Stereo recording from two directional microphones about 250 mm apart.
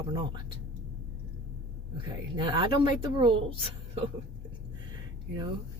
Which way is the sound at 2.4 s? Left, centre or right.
Centre.